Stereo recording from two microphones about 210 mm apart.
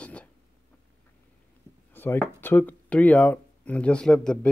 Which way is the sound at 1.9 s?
10° left (ahead or behind).